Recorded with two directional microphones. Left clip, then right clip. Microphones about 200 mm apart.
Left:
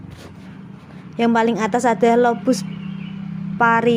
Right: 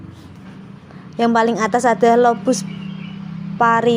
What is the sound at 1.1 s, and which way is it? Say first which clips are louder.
A woman's voice: right 2 dB; 30° left (ahead or behind).